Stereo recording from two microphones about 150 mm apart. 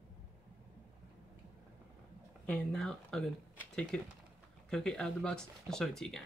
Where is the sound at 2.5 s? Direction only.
5° left (ahead or behind).